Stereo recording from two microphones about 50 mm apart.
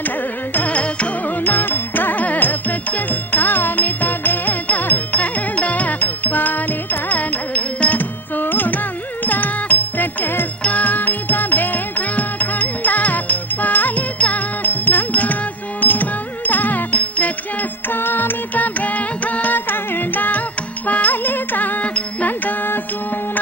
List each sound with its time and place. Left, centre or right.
0.5 s music: left
1.4 s music: left
17.8 s music: left